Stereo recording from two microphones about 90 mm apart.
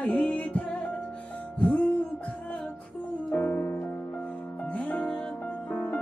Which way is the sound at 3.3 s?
20° left (ahead or behind).